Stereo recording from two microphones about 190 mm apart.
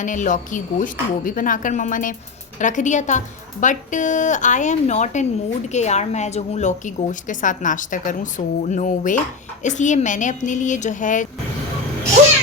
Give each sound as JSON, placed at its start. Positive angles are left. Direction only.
{"t": 0.0, "sound": "a woman's voice", "side_deg": 40}